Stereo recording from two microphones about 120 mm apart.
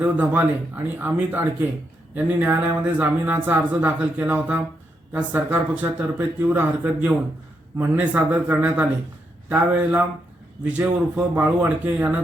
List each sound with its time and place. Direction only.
0.0 s speech: 15° right (ahead or behind)